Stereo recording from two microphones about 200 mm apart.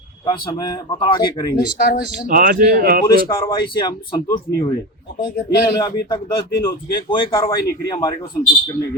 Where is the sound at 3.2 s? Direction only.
20° left (ahead or behind).